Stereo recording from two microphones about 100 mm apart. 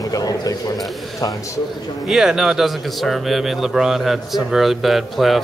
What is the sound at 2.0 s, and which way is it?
Speech, 5° right (ahead or behind).